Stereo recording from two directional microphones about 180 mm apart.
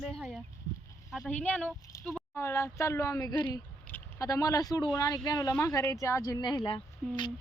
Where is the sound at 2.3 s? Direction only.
15° left (ahead or behind).